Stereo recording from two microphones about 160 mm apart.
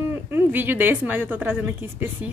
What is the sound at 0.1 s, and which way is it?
A woman's voice, 15° right (ahead or behind).